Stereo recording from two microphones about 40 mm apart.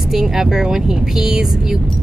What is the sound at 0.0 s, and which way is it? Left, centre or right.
Speech, centre.